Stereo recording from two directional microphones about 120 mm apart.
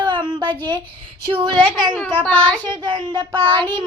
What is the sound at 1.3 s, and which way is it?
Child singing, 40° right (ahead or behind).